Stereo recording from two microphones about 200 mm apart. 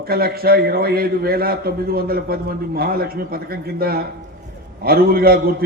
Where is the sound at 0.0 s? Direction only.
50° right (ahead or behind).